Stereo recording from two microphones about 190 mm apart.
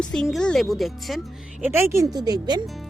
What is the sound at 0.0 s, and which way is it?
Speech, 5° left (ahead or behind).